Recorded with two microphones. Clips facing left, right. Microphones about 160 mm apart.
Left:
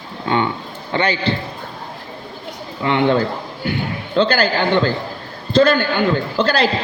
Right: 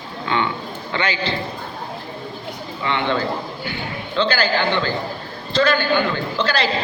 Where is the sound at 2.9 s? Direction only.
45° left (ahead or behind).